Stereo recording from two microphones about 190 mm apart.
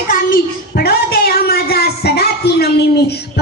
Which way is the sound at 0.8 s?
55° left (ahead or behind).